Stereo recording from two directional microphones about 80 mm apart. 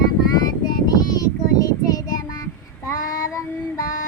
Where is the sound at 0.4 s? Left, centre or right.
Left.